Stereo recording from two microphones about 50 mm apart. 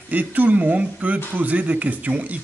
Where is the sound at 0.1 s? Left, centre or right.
Right.